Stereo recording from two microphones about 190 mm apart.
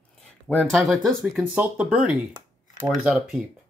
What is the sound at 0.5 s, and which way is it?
Speech, centre (ahead or behind).